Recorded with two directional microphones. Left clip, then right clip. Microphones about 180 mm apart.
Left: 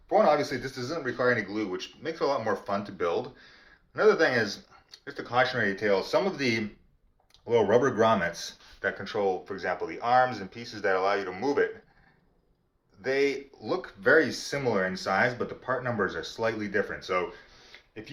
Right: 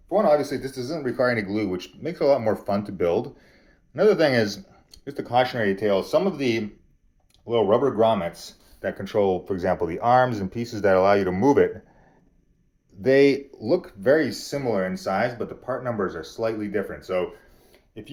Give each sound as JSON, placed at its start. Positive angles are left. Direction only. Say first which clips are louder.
{"t": 0.1, "sound": "speech", "louder": "right 3 dB", "side_deg": -25}
{"t": 9.0, "sound": "speech", "louder": "right 9 dB", "side_deg": -35}
{"t": 13.0, "sound": "speech", "louder": "right 9 dB", "side_deg": -40}
{"t": 17.7, "sound": "a sound", "louder": "right 2 dB", "side_deg": -25}